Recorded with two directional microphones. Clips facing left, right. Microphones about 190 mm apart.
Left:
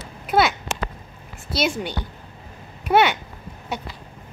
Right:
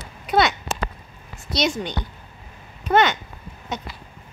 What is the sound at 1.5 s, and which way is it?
Speech, 5° left (ahead or behind).